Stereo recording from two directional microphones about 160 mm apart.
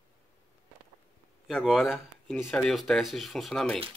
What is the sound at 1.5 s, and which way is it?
Speech, centre (ahead or behind).